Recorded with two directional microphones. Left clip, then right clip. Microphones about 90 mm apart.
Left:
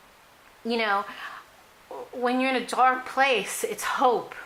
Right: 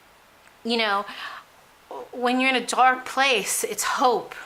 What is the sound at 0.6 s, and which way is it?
Speech, 30° right (ahead or behind).